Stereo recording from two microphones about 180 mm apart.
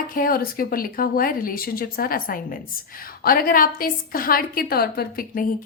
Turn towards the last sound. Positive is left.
turn(degrees=50)  # may be behind; listen again after turning